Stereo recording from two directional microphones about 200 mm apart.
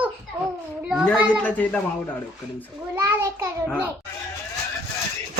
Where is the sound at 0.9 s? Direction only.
5° right (ahead or behind).